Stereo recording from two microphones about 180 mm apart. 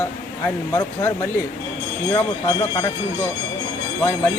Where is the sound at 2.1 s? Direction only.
25° left (ahead or behind).